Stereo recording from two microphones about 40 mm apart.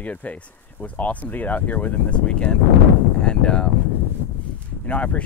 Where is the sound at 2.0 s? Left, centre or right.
Left.